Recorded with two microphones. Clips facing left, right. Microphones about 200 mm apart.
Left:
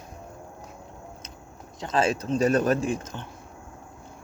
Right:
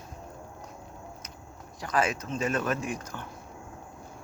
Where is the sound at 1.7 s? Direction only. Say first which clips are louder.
Left 4 dB; 25° left (ahead or behind).